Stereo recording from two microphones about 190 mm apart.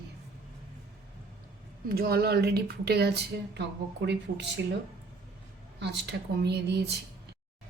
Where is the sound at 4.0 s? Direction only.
70° right (ahead or behind).